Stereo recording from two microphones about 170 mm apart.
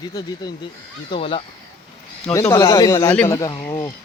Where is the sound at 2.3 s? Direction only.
20° left (ahead or behind).